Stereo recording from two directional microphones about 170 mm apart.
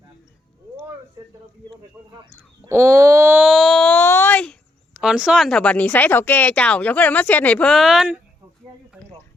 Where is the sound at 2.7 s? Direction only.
15° right (ahead or behind).